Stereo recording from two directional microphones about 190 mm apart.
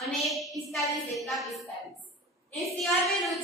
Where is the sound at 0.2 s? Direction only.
Centre (ahead or behind).